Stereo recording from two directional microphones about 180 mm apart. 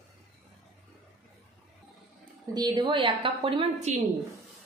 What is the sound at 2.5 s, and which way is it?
A woman's voice, 25° right (ahead or behind).